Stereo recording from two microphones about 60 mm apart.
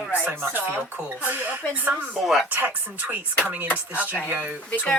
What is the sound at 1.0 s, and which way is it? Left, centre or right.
Speech, right.